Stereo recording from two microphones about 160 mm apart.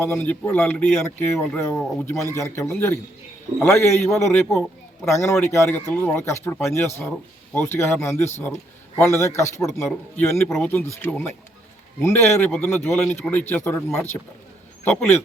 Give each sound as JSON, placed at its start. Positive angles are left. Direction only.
{"t": 0.0, "sound": "speech", "side_deg": 15}